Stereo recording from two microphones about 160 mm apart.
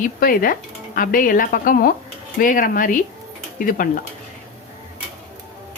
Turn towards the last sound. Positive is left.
turn(degrees=60)  # may be behind; listen again after turning